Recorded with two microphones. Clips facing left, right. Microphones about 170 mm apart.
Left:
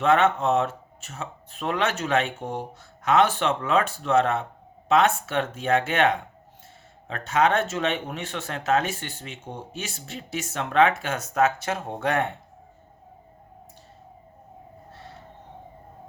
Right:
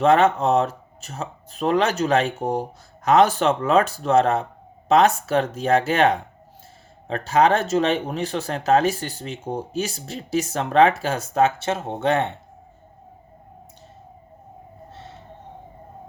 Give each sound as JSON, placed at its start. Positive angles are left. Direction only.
{"t": 0.0, "sound": "speech", "side_deg": -35}